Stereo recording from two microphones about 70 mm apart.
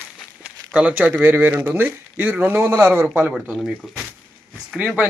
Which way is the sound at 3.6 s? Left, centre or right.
Centre.